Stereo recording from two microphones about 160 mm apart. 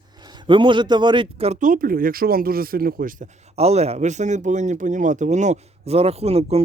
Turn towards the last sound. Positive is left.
turn(degrees=-40)  # may be behind; listen again after turning